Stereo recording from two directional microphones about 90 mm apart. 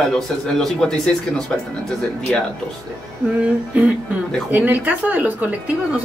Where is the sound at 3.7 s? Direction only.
15° right (ahead or behind).